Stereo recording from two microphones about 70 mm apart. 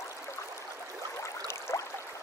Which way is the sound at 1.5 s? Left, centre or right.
Left.